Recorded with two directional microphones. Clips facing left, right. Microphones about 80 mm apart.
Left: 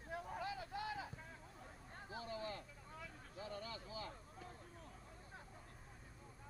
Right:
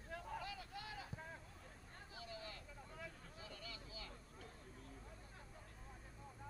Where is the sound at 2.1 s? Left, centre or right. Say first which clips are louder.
Left 7 dB; left.